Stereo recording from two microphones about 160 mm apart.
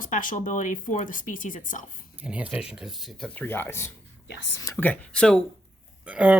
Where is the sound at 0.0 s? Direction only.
55° left (ahead or behind).